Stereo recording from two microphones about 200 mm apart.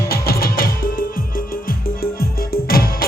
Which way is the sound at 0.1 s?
50° left (ahead or behind).